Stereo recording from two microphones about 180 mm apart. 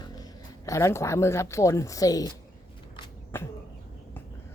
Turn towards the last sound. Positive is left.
turn(degrees=10)  # may be behind; listen again after turning